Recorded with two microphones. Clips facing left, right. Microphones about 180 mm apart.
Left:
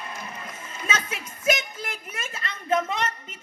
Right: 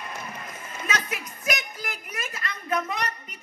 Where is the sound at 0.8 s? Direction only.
25° left (ahead or behind).